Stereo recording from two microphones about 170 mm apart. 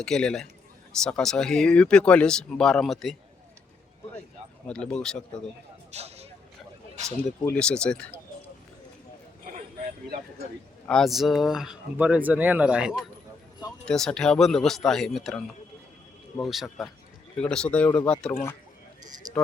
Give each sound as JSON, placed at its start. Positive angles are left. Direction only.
{"t": 0.0, "sound": "speech", "side_deg": 5}
{"t": 4.7, "sound": "speech", "side_deg": 5}
{"t": 5.9, "sound": "speech", "side_deg": -40}
{"t": 7.4, "sound": "speech", "side_deg": 5}
{"t": 10.8, "sound": "speech", "side_deg": 0}